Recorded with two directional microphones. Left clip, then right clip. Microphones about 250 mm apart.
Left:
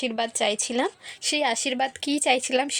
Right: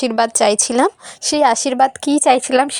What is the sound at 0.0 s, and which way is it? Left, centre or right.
A woman's voice, right.